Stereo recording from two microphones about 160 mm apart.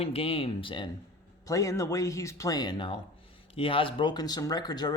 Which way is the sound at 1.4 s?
20° left (ahead or behind).